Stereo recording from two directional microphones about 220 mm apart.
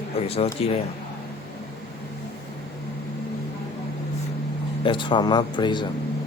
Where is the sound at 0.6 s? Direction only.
25° left (ahead or behind).